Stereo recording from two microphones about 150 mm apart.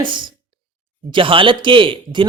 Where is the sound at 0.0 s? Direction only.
30° right (ahead or behind).